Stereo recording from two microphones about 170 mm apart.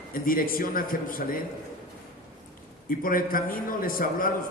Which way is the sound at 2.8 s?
55° left (ahead or behind).